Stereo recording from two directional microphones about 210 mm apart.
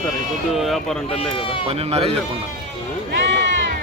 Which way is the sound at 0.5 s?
Centre (ahead or behind).